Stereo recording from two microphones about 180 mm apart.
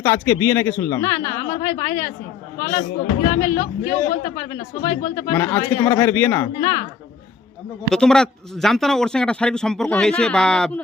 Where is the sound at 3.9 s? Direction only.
40° left (ahead or behind).